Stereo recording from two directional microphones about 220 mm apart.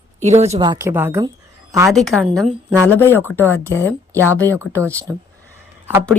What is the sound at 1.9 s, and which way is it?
A woman's voice, centre (ahead or behind).